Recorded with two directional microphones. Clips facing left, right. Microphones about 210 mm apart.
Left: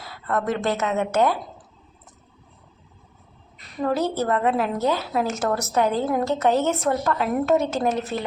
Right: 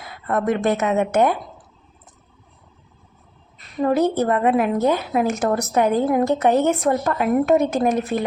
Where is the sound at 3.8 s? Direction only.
15° right (ahead or behind).